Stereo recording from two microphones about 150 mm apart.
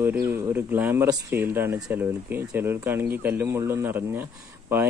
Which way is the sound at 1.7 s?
5° right (ahead or behind).